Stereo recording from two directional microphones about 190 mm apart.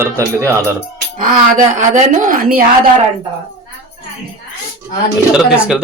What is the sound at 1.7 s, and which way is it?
Speech, 40° right (ahead or behind).